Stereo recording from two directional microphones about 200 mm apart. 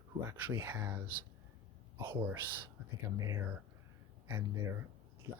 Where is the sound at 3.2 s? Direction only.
15° right (ahead or behind).